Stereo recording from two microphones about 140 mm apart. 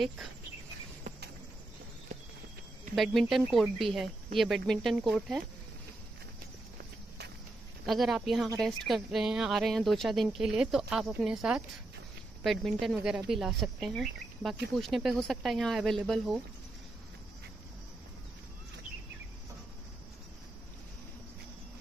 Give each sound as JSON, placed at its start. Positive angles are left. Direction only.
{"t": 1.1, "sound": "a sound", "side_deg": -60}
{"t": 3.0, "sound": "speech", "side_deg": 0}
{"t": 7.8, "sound": "speech", "side_deg": 0}